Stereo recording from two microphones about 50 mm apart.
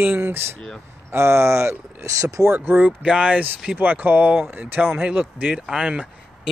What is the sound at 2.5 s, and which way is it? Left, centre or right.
Speech, right.